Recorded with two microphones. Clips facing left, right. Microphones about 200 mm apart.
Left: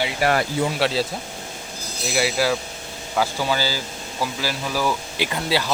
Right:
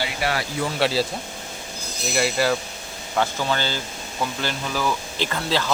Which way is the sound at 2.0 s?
Centre (ahead or behind).